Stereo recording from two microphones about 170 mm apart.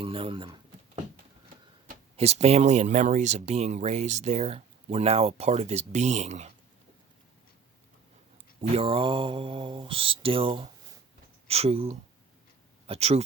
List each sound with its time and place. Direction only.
0.0 s speech: 30° right (ahead or behind)
2.1 s speech: 40° right (ahead or behind)
8.7 s speech: 35° right (ahead or behind)